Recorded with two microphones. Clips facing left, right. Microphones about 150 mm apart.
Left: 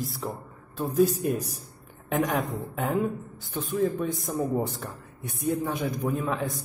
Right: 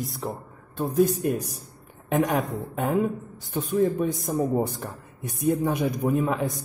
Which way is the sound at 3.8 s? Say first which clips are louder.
Right 3 dB; 15° right (ahead or behind).